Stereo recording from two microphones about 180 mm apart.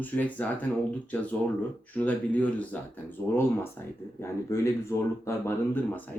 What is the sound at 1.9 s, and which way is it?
Speech, 10° left (ahead or behind).